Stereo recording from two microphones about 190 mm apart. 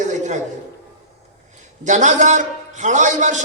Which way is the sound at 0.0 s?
40° right (ahead or behind).